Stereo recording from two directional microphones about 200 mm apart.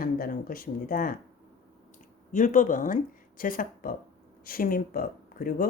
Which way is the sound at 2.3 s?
40° left (ahead or behind).